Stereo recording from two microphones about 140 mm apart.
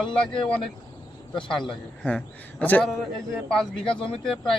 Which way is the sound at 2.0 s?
10° left (ahead or behind).